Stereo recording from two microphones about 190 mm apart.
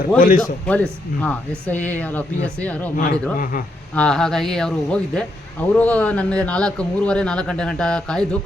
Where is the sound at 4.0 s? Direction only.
5° left (ahead or behind).